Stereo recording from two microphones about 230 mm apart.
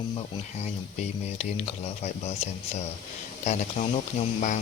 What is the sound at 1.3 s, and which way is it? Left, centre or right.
Speech, left.